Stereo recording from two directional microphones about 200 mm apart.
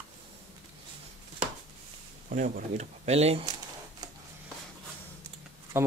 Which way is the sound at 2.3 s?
40° right (ahead or behind).